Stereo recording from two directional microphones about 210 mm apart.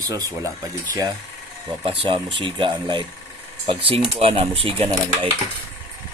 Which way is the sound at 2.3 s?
25° right (ahead or behind).